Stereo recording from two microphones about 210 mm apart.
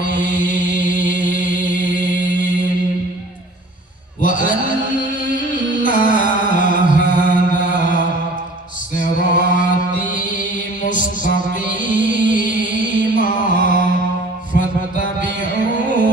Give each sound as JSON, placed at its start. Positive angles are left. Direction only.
{"t": 0.0, "sound": "chant", "side_deg": 40}
{"t": 4.2, "sound": "a sound", "side_deg": 40}
{"t": 5.8, "sound": "music", "side_deg": 40}
{"t": 9.0, "sound": "mantra", "side_deg": 40}
{"t": 10.8, "sound": "music", "side_deg": 40}